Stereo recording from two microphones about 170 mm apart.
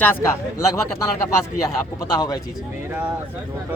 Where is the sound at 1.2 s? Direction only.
20° left (ahead or behind).